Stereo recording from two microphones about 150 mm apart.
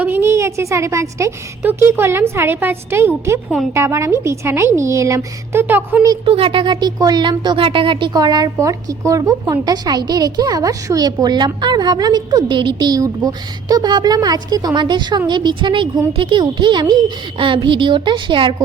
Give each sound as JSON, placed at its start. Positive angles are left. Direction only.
{"t": 0.0, "sound": "a woman's voice", "side_deg": -15}
{"t": 6.2, "sound": "speech", "side_deg": -35}